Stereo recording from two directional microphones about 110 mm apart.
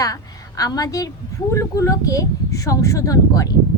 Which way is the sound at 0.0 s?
30° left (ahead or behind).